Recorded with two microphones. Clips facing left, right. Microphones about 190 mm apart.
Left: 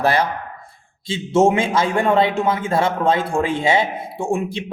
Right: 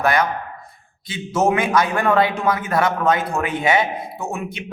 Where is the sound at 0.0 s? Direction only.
30° left (ahead or behind).